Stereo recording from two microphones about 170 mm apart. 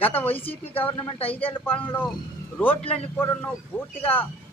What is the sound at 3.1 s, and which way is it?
Speech, 10° left (ahead or behind).